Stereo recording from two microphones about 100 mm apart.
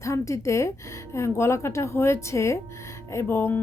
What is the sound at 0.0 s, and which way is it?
Speech, 30° left (ahead or behind).